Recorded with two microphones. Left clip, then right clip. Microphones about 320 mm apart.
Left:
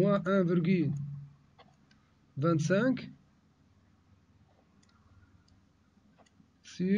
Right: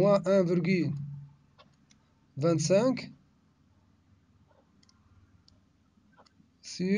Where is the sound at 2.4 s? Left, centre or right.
Centre.